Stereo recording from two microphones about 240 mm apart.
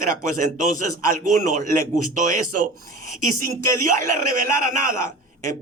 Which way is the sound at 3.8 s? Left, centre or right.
Right.